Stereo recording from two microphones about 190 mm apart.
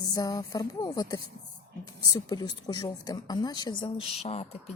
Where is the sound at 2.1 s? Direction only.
20° left (ahead or behind).